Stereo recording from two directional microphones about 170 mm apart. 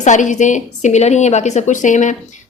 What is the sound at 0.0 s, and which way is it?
A woman's voice, 45° left (ahead or behind).